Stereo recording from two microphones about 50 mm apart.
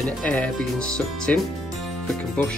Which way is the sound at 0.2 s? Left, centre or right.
Left.